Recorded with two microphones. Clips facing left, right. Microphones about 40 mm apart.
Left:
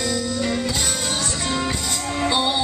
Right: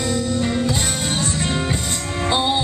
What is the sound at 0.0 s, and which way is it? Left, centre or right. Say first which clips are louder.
Music: right 2 dB; right.